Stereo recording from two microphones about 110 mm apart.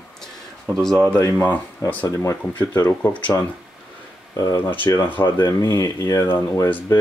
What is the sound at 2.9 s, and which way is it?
Speech, 15° left (ahead or behind).